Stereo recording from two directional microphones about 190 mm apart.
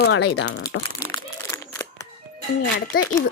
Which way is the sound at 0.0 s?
80° left.